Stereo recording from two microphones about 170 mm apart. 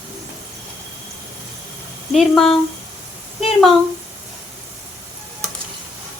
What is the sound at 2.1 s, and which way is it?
Speech, 5° left (ahead or behind).